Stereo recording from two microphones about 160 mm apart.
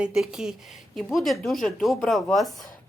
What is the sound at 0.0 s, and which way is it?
Speech, 5° right (ahead or behind).